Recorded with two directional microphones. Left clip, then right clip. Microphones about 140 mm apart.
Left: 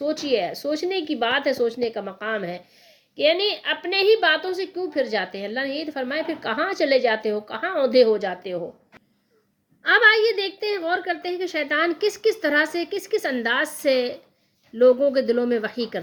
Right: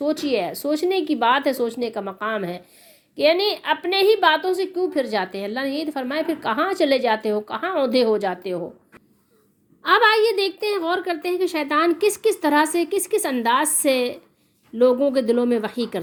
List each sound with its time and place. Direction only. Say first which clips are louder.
0.2 s a woman's voice: even; 20° right (ahead or behind)
9.8 s a woman's voice: even; 25° right (ahead or behind)